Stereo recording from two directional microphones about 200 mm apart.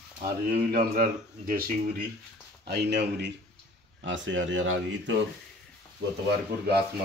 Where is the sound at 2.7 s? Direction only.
55° right (ahead or behind); by 5.2 s 75° right (ahead or behind).